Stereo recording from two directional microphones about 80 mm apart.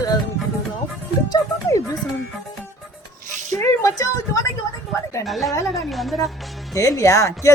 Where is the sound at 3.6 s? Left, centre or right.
Left.